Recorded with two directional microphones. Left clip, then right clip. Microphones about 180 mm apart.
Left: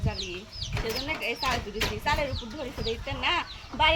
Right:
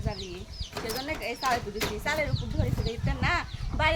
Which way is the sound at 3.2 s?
20° right (ahead or behind).